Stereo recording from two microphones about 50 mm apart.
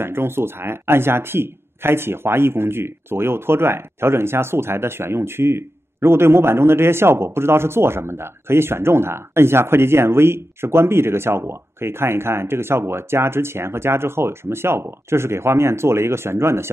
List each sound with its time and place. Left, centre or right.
0.0 s speech: right